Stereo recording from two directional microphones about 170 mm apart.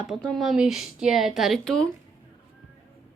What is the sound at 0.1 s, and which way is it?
A woman's voice, centre (ahead or behind).